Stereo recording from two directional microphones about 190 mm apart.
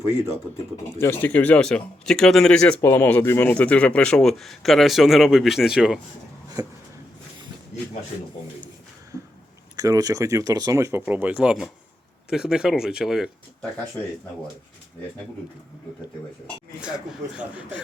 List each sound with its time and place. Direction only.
0.9 s speech: 10° left (ahead or behind)
6.6 s a sound: 20° right (ahead or behind)
9.7 s speech: 20° right (ahead or behind); by 13.7 s centre (ahead or behind)
16.8 s speech: 5° right (ahead or behind)